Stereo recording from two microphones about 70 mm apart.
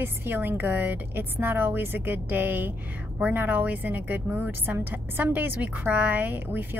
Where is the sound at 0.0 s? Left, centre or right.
Right.